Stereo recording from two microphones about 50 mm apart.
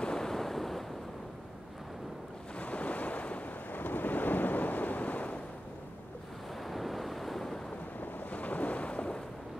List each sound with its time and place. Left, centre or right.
0.0 s waves: centre
2.6 s waves: left
6.6 s waves: centre
8.0 s waves: left